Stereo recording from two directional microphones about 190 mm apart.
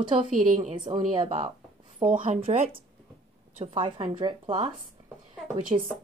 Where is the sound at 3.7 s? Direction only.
25° right (ahead or behind).